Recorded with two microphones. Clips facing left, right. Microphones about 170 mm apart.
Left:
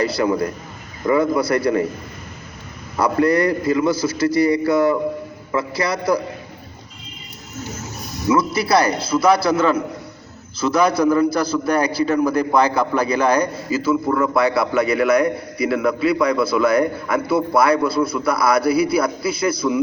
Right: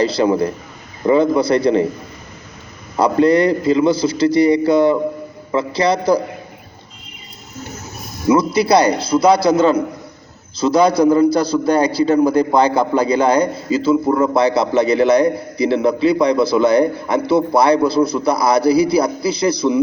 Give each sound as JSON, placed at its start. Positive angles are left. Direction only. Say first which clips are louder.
{"t": 0.0, "sound": "a man's voice", "louder": "right 4 dB", "side_deg": -25}
{"t": 3.0, "sound": "a man's voice", "louder": "right 4 dB", "side_deg": -25}
{"t": 8.4, "sound": "a man's voice", "louder": "right 4 dB", "side_deg": -20}
{"t": 10.6, "sound": "a man's voice", "louder": "right 4 dB", "side_deg": -35}